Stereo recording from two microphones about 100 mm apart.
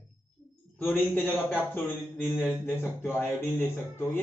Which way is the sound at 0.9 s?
20° left (ahead or behind).